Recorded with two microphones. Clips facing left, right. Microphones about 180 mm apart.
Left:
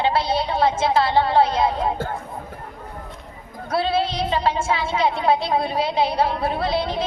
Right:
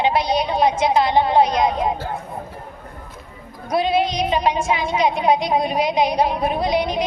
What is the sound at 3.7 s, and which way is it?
A woman's voice, 15° right (ahead or behind).